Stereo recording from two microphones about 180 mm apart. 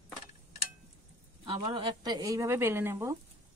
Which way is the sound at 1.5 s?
25° right (ahead or behind).